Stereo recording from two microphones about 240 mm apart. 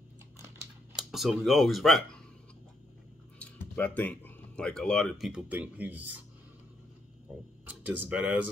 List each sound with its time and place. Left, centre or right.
0.9 s speech: centre
3.3 s speech: centre
7.6 s speech: centre